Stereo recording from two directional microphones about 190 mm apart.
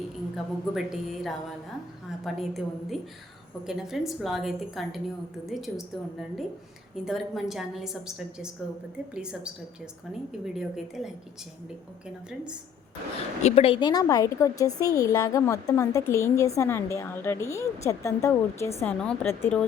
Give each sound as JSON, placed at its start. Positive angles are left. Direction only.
{"t": 0.3, "sound": "a woman's voice", "side_deg": 0}
{"t": 13.4, "sound": "a woman's voice", "side_deg": 30}